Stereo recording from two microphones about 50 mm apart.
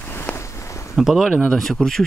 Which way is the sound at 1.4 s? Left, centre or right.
Centre.